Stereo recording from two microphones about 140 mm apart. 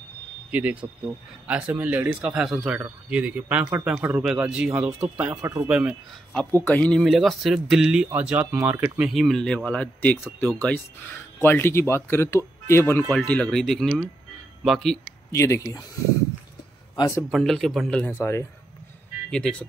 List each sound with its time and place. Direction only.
0.5 s speech: 10° right (ahead or behind)
5.4 s speech: 20° right (ahead or behind)
5.7 s speech: 10° right (ahead or behind)
6.3 s speech: 15° left (ahead or behind); by 9.0 s 10° right (ahead or behind)
9.0 s speech: centre (ahead or behind); by 13.0 s 20° left (ahead or behind)
13.1 s speech: 10° left (ahead or behind)
15.3 s speech: 20° left (ahead or behind)
17.3 s speech: centre (ahead or behind)
18.1 s speech: 20° left (ahead or behind)